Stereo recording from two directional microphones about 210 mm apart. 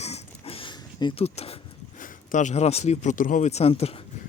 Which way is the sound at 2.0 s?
35° left (ahead or behind).